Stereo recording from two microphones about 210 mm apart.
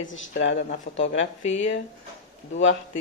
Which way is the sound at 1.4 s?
30° left (ahead or behind).